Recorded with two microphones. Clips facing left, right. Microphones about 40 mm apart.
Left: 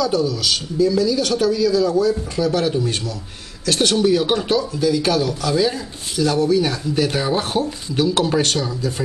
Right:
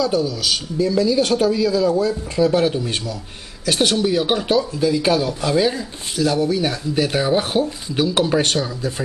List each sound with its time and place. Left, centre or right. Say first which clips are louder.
0.2 s a man's voice: left 1 dB; centre